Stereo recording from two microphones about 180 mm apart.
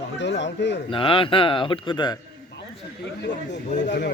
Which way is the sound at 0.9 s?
30° left (ahead or behind).